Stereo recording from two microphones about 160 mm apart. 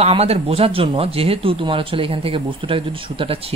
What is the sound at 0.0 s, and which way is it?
Speech, 40° right (ahead or behind).